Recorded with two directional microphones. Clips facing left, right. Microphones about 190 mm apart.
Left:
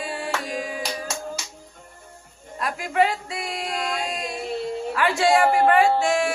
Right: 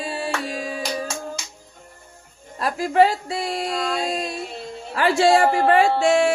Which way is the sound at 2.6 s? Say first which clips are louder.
Right 5 dB; 35° right (ahead or behind).